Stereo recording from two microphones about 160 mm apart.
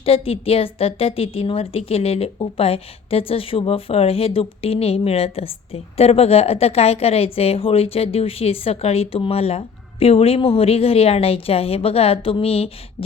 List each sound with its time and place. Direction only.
0.0 s a woman's voice: 35° left (ahead or behind)